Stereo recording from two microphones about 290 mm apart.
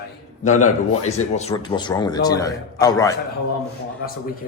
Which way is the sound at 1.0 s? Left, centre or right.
Left.